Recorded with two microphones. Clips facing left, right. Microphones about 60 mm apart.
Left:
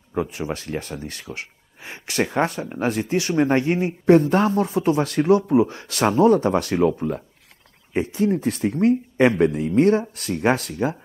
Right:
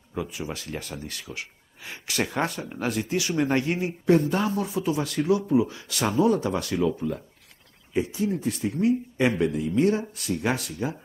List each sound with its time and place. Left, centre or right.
0.1 s speech: left
6.8 s speech: left